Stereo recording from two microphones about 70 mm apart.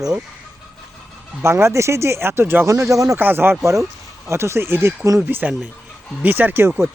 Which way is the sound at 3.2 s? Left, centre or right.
Right.